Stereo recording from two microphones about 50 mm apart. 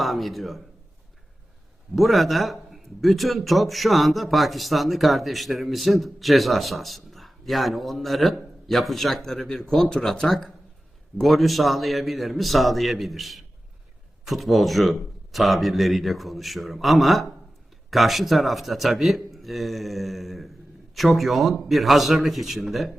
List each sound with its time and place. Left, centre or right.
0.0 s a man's voice: centre
2.0 s speech: centre